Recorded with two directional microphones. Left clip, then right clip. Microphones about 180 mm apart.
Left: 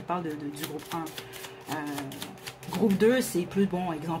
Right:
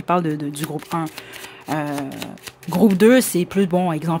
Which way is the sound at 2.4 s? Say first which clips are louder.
Right 10 dB; 40° right (ahead or behind).